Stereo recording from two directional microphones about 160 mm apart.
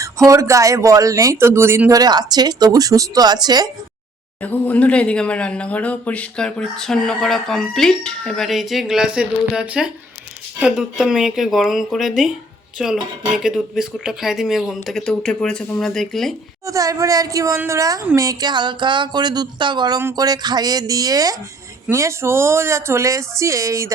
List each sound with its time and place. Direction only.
0.3 s speech: 20° right (ahead or behind)
4.4 s speech: 10° left (ahead or behind)
16.6 s speech: 20° right (ahead or behind)